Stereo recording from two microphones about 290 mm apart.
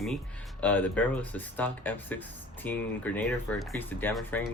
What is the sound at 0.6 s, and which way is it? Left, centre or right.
Speech, centre.